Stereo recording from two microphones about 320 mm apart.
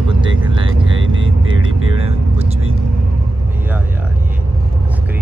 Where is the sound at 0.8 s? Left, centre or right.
Right.